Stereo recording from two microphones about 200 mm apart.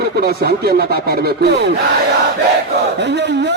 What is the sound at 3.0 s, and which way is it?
Speech, 60° right (ahead or behind).